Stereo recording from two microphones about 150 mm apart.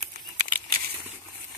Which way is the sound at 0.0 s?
60° right (ahead or behind).